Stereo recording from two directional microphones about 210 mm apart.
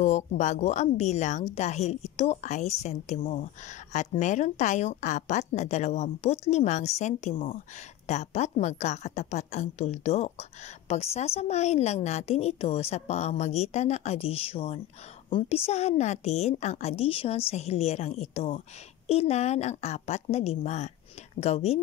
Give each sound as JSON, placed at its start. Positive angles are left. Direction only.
{"t": 0.0, "sound": "a woman's voice", "side_deg": 35}